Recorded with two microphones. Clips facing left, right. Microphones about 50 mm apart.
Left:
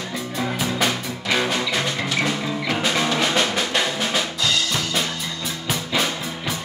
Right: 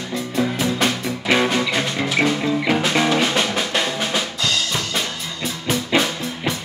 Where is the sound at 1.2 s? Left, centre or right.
Right.